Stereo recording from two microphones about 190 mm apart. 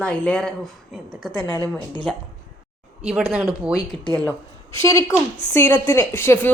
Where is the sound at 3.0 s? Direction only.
5° right (ahead or behind).